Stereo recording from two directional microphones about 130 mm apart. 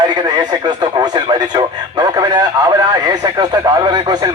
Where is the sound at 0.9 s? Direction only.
30° right (ahead or behind).